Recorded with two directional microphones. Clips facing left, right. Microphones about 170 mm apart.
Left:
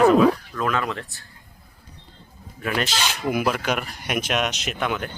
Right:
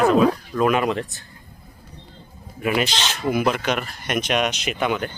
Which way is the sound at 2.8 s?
10° left (ahead or behind).